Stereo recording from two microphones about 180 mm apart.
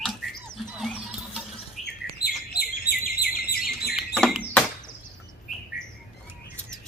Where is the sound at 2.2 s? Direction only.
60° left (ahead or behind).